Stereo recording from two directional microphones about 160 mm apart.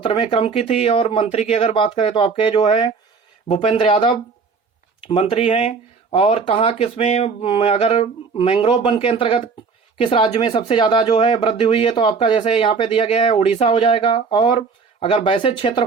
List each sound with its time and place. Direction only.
0.0 s speech: 30° left (ahead or behind)
3.5 s speech: 40° left (ahead or behind)